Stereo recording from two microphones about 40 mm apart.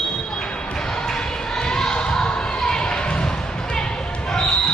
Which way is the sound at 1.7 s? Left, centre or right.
Centre.